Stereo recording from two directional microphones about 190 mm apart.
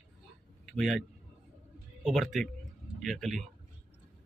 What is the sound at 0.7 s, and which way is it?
Speech, centre (ahead or behind).